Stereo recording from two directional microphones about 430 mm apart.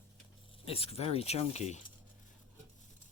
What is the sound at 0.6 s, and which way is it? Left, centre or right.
Speech, centre.